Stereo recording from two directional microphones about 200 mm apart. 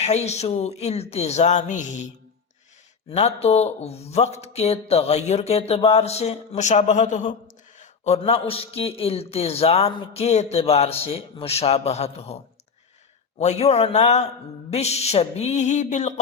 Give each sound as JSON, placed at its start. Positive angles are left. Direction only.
{"t": 0.0, "sound": "speech", "side_deg": 35}
{"t": 3.1, "sound": "speech", "side_deg": 30}
{"t": 13.4, "sound": "speech", "side_deg": 35}